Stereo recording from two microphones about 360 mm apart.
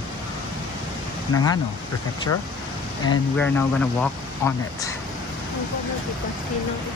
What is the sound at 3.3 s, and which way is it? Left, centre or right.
Speech, centre.